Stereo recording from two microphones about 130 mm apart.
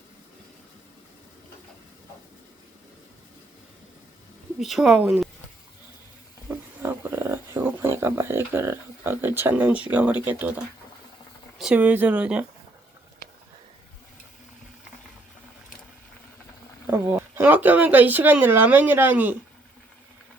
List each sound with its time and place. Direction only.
4.6 s speech: centre (ahead or behind)
6.8 s a sound: 20° right (ahead or behind)
11.5 s speech: 10° right (ahead or behind)
16.8 s speech: 15° right (ahead or behind)